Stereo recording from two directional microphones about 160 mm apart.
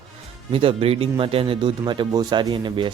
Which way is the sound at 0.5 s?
35° right (ahead or behind).